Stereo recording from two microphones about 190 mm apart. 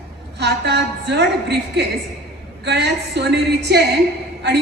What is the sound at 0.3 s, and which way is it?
A woman's voice, 60° right (ahead or behind).